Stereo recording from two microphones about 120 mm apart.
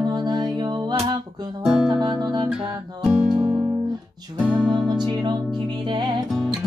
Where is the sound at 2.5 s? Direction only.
5° right (ahead or behind).